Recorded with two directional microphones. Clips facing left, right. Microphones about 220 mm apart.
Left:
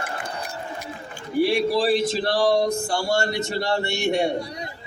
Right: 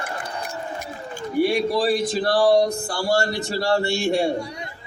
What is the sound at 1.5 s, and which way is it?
Speech, 25° left (ahead or behind).